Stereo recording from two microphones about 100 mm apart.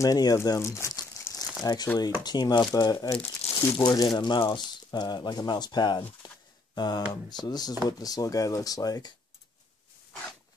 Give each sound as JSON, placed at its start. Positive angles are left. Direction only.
{"t": 0.0, "sound": "speech", "side_deg": 35}
{"t": 1.6, "sound": "chopping", "side_deg": 40}
{"t": 3.7, "sound": "speech", "side_deg": 40}
{"t": 6.7, "sound": "a sound", "side_deg": 45}
{"t": 7.1, "sound": "speech", "side_deg": 45}
{"t": 7.8, "sound": "chopping", "side_deg": 40}